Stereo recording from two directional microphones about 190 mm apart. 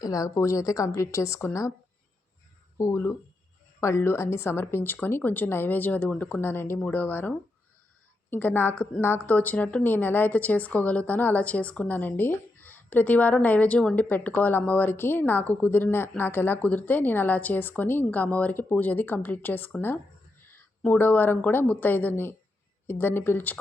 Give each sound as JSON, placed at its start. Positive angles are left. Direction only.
{"t": 0.0, "sound": "a woman's voice", "side_deg": 20}
{"t": 2.7, "sound": "a woman's voice", "side_deg": 15}